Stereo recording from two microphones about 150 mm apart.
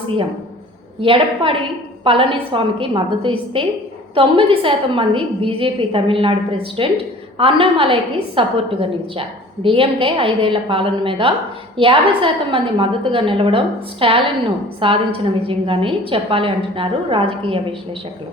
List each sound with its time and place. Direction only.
1.0 s a woman's voice: 35° right (ahead or behind)